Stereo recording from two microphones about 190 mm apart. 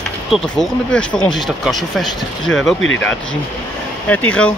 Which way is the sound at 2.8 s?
90° left.